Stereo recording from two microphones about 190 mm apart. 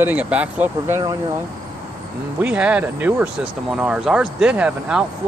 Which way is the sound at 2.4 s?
5° right (ahead or behind).